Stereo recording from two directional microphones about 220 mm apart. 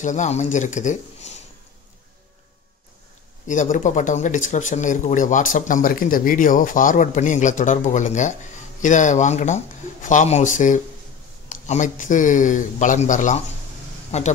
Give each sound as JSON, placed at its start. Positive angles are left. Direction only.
{"t": 0.0, "sound": "speech", "side_deg": 35}
{"t": 3.4, "sound": "speech", "side_deg": 35}